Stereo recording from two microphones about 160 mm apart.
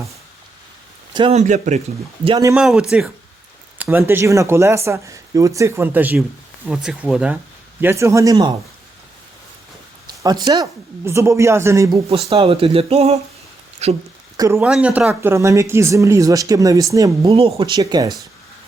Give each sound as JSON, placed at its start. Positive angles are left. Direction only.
{"t": 1.1, "sound": "speech", "side_deg": -30}
{"t": 1.4, "sound": "speech", "side_deg": -50}
{"t": 2.6, "sound": "speech", "side_deg": -5}
{"t": 3.8, "sound": "speech", "side_deg": -15}
{"t": 10.2, "sound": "speech", "side_deg": -25}
{"t": 12.3, "sound": "speech", "side_deg": -35}
{"t": 14.3, "sound": "speech", "side_deg": -20}
{"t": 14.6, "sound": "speech", "side_deg": -10}
{"t": 17.2, "sound": "speech", "side_deg": -35}
{"t": 17.7, "sound": "speech", "side_deg": -25}